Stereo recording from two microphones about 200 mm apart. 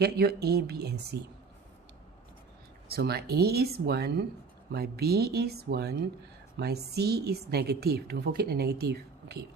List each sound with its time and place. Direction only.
0.0 s a woman's voice: 55° right (ahead or behind)
2.9 s a woman's voice: 50° right (ahead or behind)